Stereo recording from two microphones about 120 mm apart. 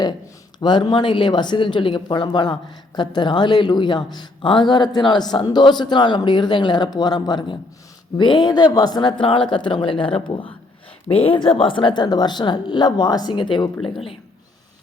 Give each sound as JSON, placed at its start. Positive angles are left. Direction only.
{"t": 0.6, "sound": "speech", "side_deg": 40}